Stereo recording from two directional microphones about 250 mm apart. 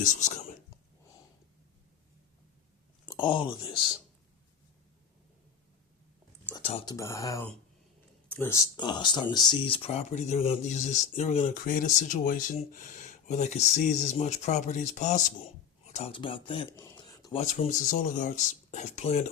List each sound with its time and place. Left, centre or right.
0.0 s speech: left
3.1 s speech: centre
6.6 s speech: left
6.9 s speech: centre
17.4 s speech: left